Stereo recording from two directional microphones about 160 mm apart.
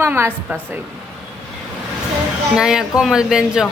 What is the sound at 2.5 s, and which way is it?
Speech, 5° right (ahead or behind).